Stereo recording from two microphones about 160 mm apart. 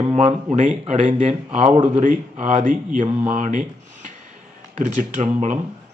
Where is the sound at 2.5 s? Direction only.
45° right (ahead or behind).